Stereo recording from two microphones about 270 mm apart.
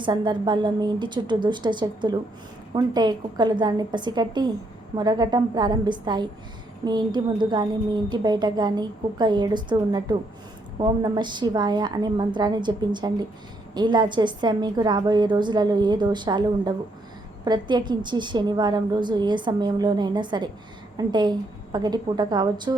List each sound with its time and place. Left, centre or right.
0.0 s a woman's voice: centre